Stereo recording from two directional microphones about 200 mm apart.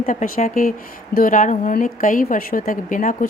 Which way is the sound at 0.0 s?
40° left (ahead or behind).